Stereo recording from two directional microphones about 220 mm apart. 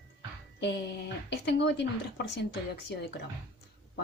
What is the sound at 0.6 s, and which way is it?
Speech, 50° left (ahead or behind).